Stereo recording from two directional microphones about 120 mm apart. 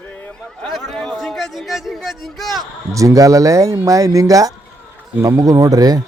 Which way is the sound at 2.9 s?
30° right (ahead or behind).